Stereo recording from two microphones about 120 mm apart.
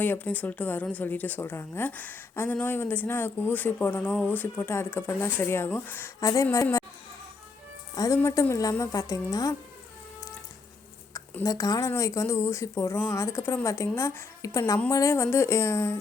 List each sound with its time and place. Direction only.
0.0 s a woman's voice: 15° left (ahead or behind)
6.1 s a woman's voice: 30° left (ahead or behind)
7.9 s a woman's voice: 25° left (ahead or behind)
11.4 s a woman's voice: 30° left (ahead or behind)